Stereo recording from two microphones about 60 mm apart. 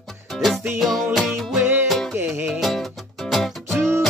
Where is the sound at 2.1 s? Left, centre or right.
Right.